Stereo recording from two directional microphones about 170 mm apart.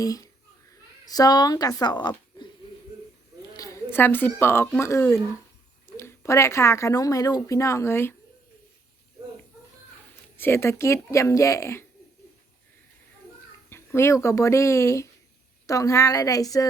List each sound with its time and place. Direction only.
0.0 s a woman's voice: 20° left (ahead or behind)
3.6 s speech: 15° left (ahead or behind)
10.3 s speech: 15° left (ahead or behind)
13.7 s a woman's voice: 15° left (ahead or behind)